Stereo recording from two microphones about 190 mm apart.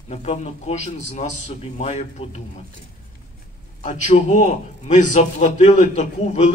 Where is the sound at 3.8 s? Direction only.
40° left (ahead or behind).